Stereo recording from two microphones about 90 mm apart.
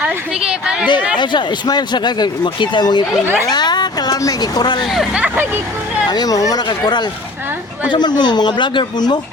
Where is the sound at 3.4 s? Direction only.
55° left (ahead or behind).